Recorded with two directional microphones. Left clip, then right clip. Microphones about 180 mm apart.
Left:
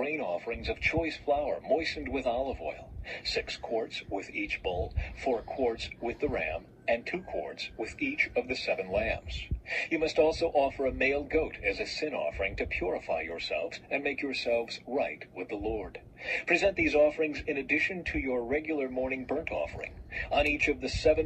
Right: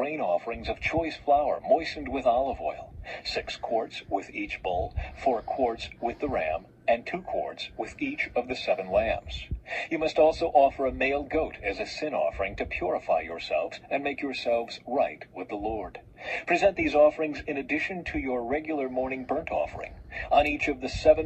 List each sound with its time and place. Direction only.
0.0 s a man's voice: 35° right (ahead or behind)